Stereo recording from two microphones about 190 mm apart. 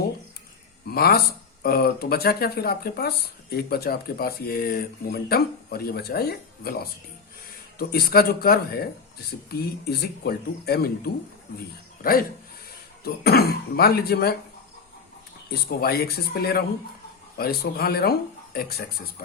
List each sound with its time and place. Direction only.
0.9 s speech: 55° left (ahead or behind)
13.1 s speech: 55° left (ahead or behind)
15.4 s speech: 55° left (ahead or behind)